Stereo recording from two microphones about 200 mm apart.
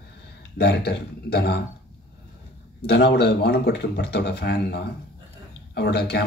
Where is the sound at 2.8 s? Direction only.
55° left (ahead or behind).